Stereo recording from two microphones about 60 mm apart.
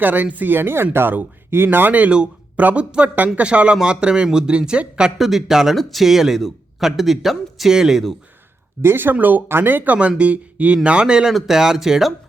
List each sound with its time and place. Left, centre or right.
0.0 s speech: right
5.1 s speech: centre
8.8 s speech: right; by 12.1 s centre